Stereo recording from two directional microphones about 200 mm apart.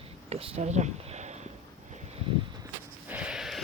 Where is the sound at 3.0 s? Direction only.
5° right (ahead or behind).